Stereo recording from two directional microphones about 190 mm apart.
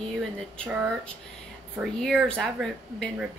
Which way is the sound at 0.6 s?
10° right (ahead or behind).